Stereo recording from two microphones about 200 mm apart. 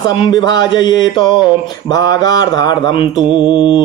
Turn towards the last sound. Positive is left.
turn(degrees=25)  # may be behind; listen again after turning